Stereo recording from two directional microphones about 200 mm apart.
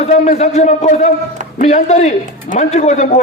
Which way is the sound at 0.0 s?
35° left (ahead or behind).